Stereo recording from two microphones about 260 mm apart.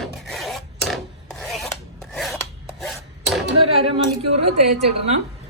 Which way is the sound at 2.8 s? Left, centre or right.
Centre.